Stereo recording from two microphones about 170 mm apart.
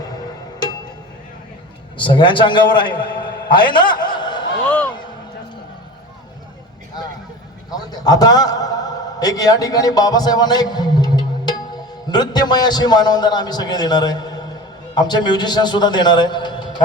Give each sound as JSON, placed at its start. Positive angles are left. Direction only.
{"t": 2.0, "sound": "a man's voice", "side_deg": 30}
{"t": 4.6, "sound": "music", "side_deg": 10}
{"t": 7.7, "sound": "a man's voice", "side_deg": 25}